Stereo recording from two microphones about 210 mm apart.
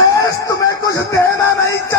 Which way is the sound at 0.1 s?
15° left (ahead or behind).